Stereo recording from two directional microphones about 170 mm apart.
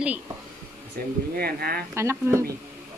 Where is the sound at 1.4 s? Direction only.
65° right (ahead or behind).